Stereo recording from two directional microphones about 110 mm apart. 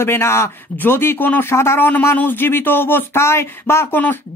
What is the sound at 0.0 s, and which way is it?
A man's voice, 25° left (ahead or behind).